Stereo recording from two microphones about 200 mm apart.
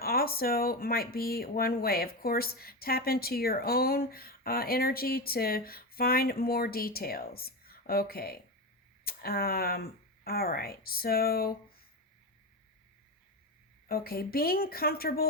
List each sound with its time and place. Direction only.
0.0 s speech: 50° left (ahead or behind)
13.8 s speech: 50° left (ahead or behind)